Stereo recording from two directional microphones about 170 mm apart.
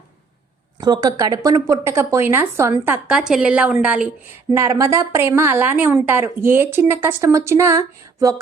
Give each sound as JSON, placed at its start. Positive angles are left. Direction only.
{"t": 0.8, "sound": "a woman's voice", "side_deg": -25}